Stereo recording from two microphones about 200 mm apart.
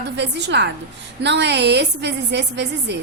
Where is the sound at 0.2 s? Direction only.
60° right (ahead or behind).